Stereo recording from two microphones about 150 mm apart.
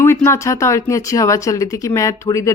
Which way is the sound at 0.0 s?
15° left (ahead or behind).